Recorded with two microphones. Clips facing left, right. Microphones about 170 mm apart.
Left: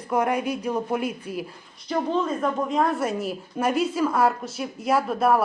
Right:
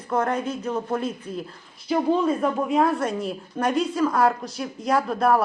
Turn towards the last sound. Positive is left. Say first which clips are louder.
# even
turn(degrees=5)  # may be behind; listen again after turning